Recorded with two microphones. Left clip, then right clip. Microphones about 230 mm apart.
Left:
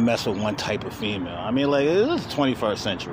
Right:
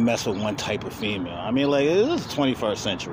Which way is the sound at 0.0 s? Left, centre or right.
Centre.